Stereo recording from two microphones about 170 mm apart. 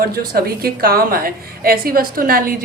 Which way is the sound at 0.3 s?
60° right (ahead or behind).